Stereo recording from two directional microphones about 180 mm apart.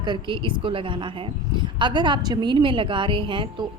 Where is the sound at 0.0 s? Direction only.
25° right (ahead or behind).